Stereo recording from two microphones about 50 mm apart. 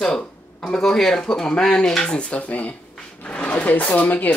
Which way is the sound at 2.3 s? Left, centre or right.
Left.